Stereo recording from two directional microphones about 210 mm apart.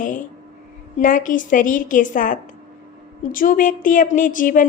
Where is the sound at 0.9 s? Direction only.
40° left (ahead or behind).